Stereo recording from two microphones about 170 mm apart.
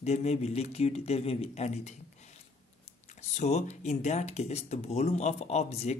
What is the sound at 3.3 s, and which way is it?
Speech, 40° left (ahead or behind).